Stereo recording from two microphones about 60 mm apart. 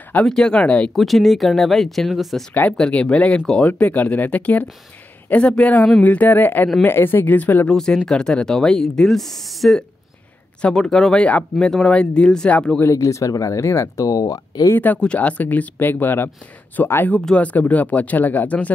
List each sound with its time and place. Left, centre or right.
0.3 s speech: centre
0.9 s speech: centre
2.8 s speech: left
7.6 s speech: centre
10.6 s speech: centre
12.9 s speech: left
14.7 s speech: left
15.0 s speech: left